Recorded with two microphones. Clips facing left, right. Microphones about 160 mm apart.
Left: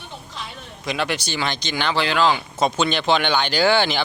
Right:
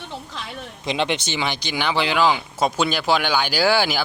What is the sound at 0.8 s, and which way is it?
Speech, 25° right (ahead or behind).